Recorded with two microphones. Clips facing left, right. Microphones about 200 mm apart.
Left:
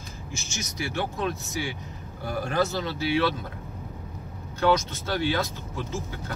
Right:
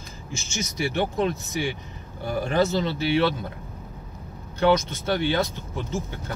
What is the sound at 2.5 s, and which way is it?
Speech, 25° right (ahead or behind).